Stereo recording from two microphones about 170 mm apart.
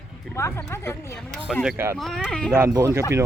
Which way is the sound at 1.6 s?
15° right (ahead or behind).